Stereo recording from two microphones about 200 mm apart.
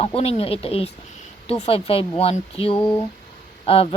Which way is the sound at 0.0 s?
30° left (ahead or behind).